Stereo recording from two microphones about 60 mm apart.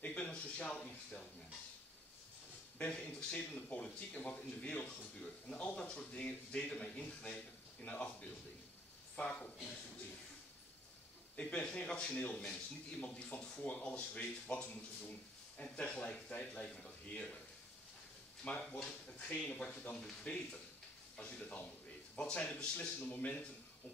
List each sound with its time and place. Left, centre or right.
0.0 s a sound: left
2.8 s speech: centre
11.3 s speech: centre
18.7 s speech: centre
20.0 s speech: centre